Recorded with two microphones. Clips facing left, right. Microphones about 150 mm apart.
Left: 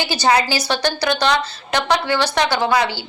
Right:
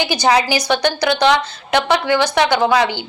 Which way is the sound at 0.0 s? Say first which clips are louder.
Right 2 dB; 15° right (ahead or behind).